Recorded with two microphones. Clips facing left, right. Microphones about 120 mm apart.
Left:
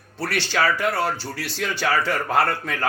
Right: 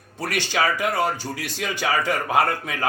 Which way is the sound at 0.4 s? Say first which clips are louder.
Left 1 dB; 15° right (ahead or behind).